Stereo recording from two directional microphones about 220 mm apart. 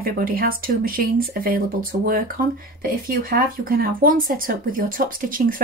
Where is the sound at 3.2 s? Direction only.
40° right (ahead or behind).